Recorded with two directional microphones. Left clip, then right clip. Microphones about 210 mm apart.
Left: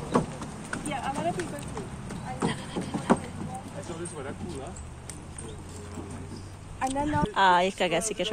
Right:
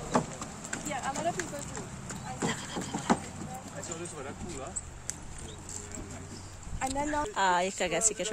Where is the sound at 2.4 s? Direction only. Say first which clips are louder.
Left 2 dB; 25° right (ahead or behind).